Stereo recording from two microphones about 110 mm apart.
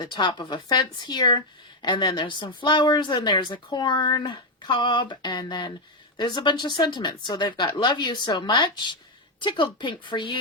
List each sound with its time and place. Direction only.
0.0 s speech: 45° left (ahead or behind)